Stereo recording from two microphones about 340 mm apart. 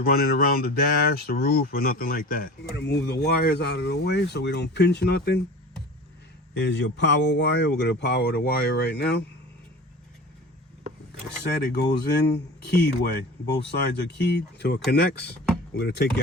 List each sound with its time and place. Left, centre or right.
0.0 s speech: left
6.5 s speech: left
11.6 s speech: left